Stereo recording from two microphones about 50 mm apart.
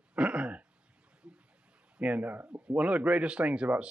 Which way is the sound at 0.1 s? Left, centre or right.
Right.